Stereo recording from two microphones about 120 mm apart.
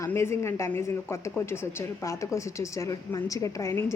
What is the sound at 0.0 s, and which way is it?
A woman's voice, 20° left (ahead or behind).